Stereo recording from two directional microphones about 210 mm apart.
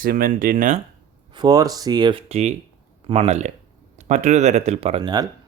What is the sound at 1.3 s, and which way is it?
Speech, 20° right (ahead or behind).